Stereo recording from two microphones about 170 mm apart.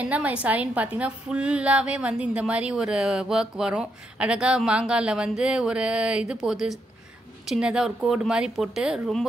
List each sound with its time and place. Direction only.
0.0 s a woman's voice: 10° right (ahead or behind)